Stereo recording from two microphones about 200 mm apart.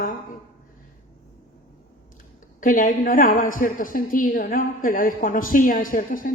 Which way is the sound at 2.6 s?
40° left (ahead or behind).